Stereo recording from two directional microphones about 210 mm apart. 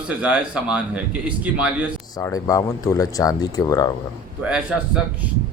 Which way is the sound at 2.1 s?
15° left (ahead or behind).